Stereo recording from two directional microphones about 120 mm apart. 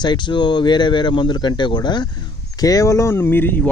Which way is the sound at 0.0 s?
40° left (ahead or behind).